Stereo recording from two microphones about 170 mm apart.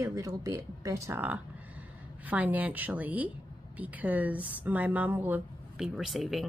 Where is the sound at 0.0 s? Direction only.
20° right (ahead or behind).